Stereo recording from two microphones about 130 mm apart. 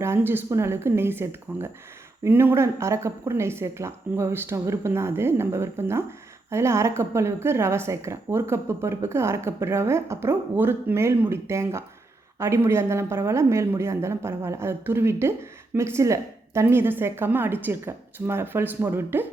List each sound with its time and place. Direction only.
0.0 s a woman's voice: 20° right (ahead or behind)